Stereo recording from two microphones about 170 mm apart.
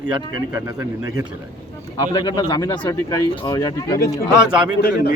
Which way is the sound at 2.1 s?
25° left (ahead or behind).